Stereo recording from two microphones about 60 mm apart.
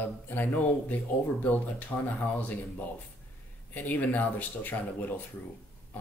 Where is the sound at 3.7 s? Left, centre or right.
Left.